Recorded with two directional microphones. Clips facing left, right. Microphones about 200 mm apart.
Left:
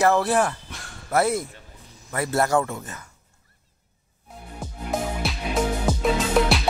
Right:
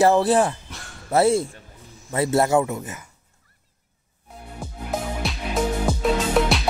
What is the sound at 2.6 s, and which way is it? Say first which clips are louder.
Speech: right 4 dB; 10° right (ahead or behind).